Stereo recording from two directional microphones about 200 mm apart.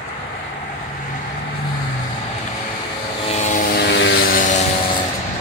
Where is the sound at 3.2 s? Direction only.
35° left (ahead or behind); by 4.4 s 60° left (ahead or behind).